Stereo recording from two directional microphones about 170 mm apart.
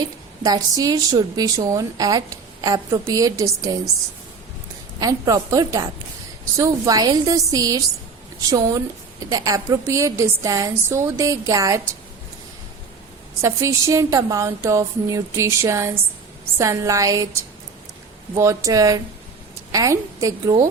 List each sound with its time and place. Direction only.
0.4 s a woman's voice: 20° right (ahead or behind)
4.9 s a woman's voice: 20° right (ahead or behind)
13.4 s a woman's voice: 15° right (ahead or behind)
18.3 s a woman's voice: 20° right (ahead or behind)